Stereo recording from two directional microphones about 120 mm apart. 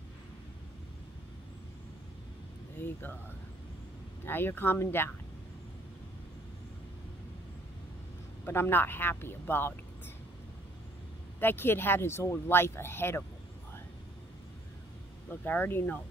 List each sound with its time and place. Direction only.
2.8 s speech: 15° left (ahead or behind)
4.2 s speech: 20° left (ahead or behind)
8.5 s speech: 20° left (ahead or behind)
11.3 s speech: 20° left (ahead or behind)
15.4 s speech: 15° left (ahead or behind)